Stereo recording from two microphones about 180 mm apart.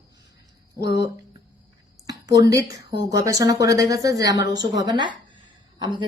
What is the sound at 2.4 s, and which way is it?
Speech, 20° right (ahead or behind).